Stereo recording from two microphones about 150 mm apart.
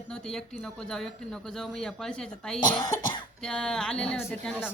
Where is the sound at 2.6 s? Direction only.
30° left (ahead or behind).